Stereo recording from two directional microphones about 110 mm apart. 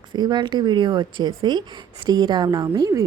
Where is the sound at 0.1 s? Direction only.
40° right (ahead or behind).